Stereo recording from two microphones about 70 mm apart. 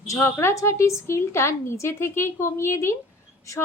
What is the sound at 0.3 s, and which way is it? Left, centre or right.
A woman's voice, left.